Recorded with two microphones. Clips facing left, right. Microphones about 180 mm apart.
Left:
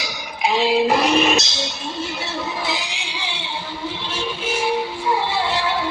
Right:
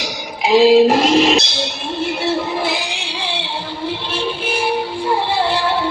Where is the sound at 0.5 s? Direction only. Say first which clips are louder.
Right 8 dB; 85° right; by 3.2 s 60° right (ahead or behind).